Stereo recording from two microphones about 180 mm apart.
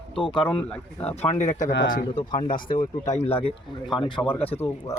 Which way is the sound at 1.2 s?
40° left (ahead or behind).